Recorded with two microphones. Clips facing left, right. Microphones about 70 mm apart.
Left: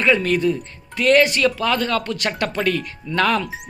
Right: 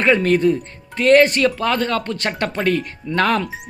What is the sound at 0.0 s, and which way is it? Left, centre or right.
Speech, right.